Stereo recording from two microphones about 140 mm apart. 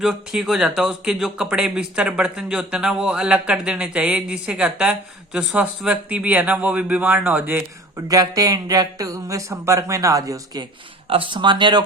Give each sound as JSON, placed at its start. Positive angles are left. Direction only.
{"t": 0.0, "sound": "speech", "side_deg": -5}
{"t": 7.9, "sound": "speech", "side_deg": -25}
{"t": 11.1, "sound": "speech", "side_deg": -40}